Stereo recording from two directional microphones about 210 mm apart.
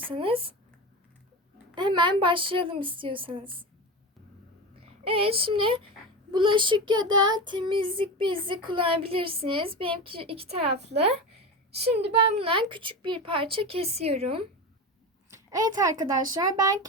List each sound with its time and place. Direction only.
0.0 s child singing: 25° right (ahead or behind)
1.7 s child singing: 20° right (ahead or behind)
4.7 s a child's voice: 25° right (ahead or behind)
6.3 s child singing: 25° right (ahead or behind)
15.3 s a child's voice: 15° right (ahead or behind)